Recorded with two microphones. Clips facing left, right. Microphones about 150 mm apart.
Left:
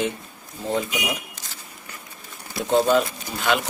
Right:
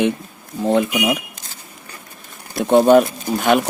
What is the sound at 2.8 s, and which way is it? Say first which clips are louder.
Speech: right 8 dB; 60° right (ahead or behind).